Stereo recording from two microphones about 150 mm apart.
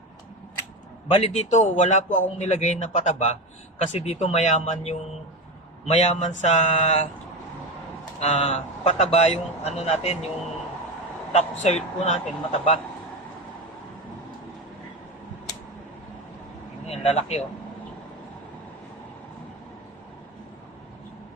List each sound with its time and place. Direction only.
1.1 s a man's voice: 45° left (ahead or behind)
8.2 s a man's voice: 45° left (ahead or behind)
11.3 s a man's voice: 45° left (ahead or behind)
16.9 s a man's voice: 40° left (ahead or behind)